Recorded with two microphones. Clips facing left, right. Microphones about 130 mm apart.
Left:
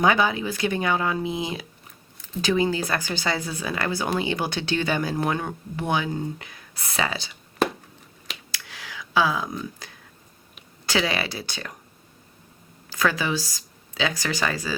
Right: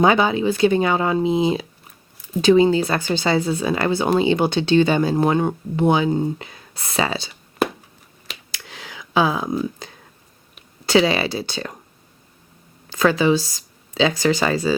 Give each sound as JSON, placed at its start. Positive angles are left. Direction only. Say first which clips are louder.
{"t": 0.0, "sound": "speech", "louder": "right 5 dB", "side_deg": -25}
{"t": 8.5, "sound": "a sound", "louder": "right 2 dB", "side_deg": -25}
{"t": 10.8, "sound": "speech", "louder": "right 8 dB", "side_deg": -25}
{"t": 12.9, "sound": "speech", "louder": "right 8 dB", "side_deg": -25}